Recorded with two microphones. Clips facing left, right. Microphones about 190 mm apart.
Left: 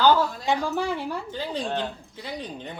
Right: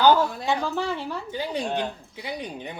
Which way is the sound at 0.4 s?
15° left (ahead or behind).